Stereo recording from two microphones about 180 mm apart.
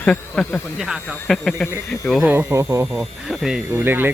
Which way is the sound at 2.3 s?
10° right (ahead or behind).